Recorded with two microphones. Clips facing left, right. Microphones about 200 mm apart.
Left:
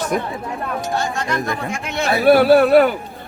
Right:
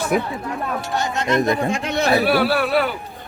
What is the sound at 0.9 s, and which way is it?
Speech, 20° right (ahead or behind).